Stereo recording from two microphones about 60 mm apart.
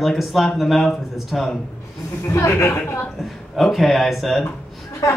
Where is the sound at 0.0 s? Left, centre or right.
Centre.